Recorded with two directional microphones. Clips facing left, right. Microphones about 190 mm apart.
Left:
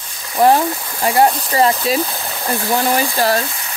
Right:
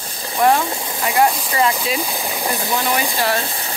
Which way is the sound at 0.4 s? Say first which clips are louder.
Left 3 dB; 30° left (ahead or behind).